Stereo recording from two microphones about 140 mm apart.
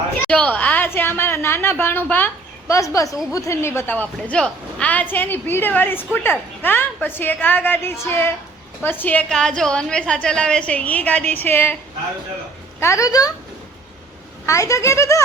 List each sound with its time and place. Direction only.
0.3 s a woman's voice: 10° left (ahead or behind)
12.8 s speech: 20° left (ahead or behind)
14.4 s speech: 20° left (ahead or behind)